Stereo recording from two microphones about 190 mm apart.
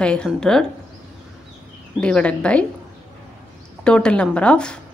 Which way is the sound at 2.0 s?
5° left (ahead or behind).